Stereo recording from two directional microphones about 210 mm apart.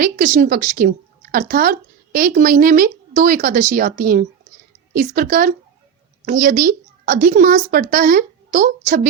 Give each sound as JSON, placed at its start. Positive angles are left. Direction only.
{"t": 0.0, "sound": "a woman's voice", "side_deg": -40}